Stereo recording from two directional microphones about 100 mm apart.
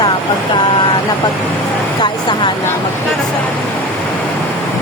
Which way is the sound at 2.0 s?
50° left (ahead or behind).